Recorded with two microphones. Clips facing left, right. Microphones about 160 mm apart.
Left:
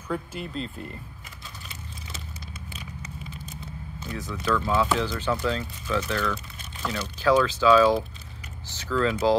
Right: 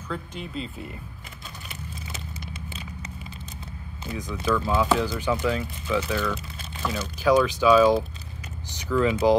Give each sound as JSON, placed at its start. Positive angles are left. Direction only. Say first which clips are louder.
{"t": 0.1, "sound": "speech", "louder": "left 2 dB", "side_deg": 5}
{"t": 2.4, "sound": "vehicle", "louder": "right 3 dB", "side_deg": -30}
{"t": 4.0, "sound": "speech", "louder": "right 2 dB", "side_deg": -15}